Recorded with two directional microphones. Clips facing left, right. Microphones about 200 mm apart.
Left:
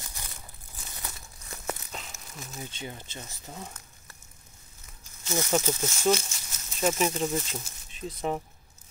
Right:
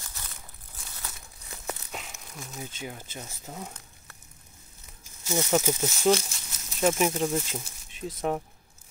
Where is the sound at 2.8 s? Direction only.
10° right (ahead or behind).